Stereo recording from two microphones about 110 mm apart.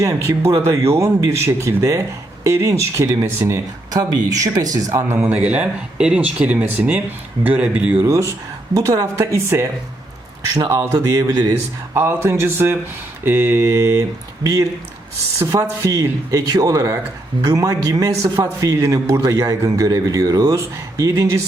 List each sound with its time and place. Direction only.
0.0 s speech: 25° right (ahead or behind)
5.0 s speech: 15° right (ahead or behind)
8.0 s a man's voice: 25° right (ahead or behind)